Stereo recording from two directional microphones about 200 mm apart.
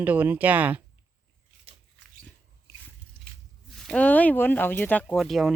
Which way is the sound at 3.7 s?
Centre (ahead or behind).